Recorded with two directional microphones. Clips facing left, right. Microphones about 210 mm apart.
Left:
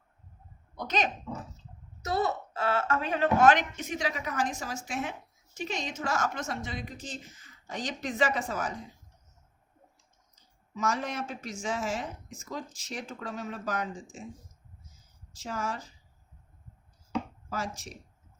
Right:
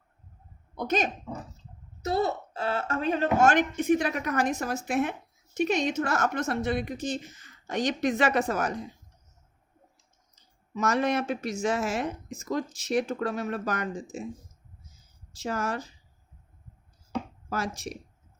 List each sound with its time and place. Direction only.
0.8 s speech: 50° right (ahead or behind)
2.0 s speech: 25° right (ahead or behind)
2.7 s a woman's voice: 40° right (ahead or behind); by 8.8 s 70° right (ahead or behind)
10.3 s speech: 70° right (ahead or behind)
15.3 s speech: 70° right (ahead or behind)
17.5 s speech: 70° right (ahead or behind)